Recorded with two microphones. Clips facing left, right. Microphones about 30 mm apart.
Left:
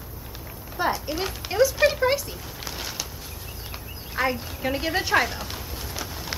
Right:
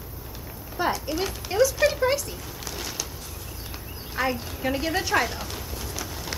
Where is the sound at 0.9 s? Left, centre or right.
Centre.